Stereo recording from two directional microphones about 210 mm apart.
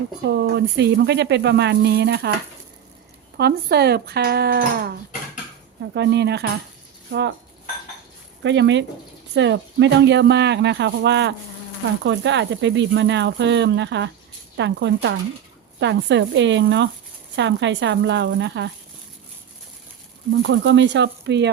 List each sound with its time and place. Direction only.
0.3 s speech: 55° right (ahead or behind)
3.3 s speech: 50° right (ahead or behind)
8.4 s speech: 55° right (ahead or behind)
20.4 s speech: 55° right (ahead or behind)